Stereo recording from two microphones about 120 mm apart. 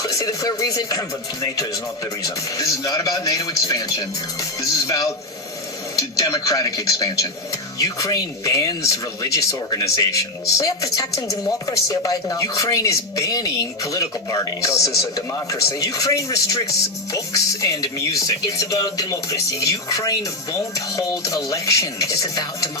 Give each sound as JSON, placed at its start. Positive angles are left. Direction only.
{"t": 0.0, "sound": "a man's voice", "side_deg": 30}
{"t": 6.0, "sound": "a man's voice", "side_deg": 30}